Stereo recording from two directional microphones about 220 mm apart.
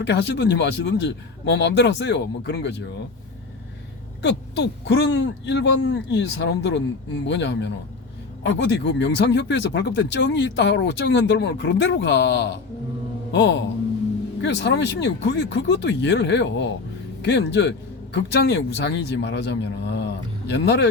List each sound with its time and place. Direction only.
0.0 s speech: 50° left (ahead or behind)
4.2 s speech: 50° left (ahead or behind)